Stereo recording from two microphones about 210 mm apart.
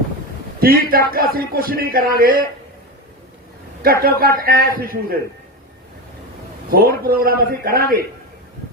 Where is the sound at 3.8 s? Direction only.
45° right (ahead or behind).